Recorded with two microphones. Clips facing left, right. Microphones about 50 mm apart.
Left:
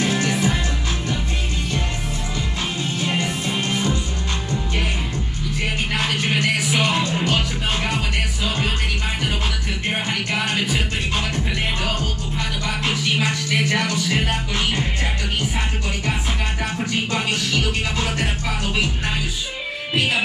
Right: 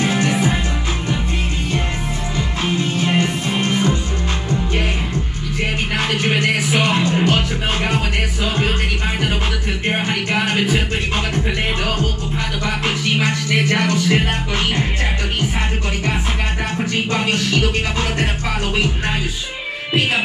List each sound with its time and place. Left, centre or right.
0.0 s music: right
2.6 s music: right
6.1 s music: centre
9.8 s music: centre
12.6 s music: centre
17.1 s music: right